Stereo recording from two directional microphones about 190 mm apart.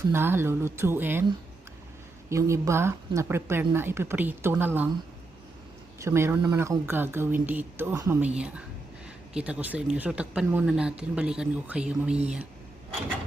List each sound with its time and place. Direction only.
0.1 s speech: 10° right (ahead or behind)
2.3 s speech: 15° right (ahead or behind)
6.0 s speech: 15° right (ahead or behind)